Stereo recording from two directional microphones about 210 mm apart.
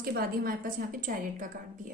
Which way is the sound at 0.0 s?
45° right (ahead or behind).